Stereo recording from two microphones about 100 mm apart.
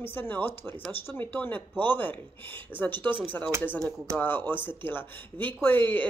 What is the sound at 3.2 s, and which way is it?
Speech, 20° left (ahead or behind).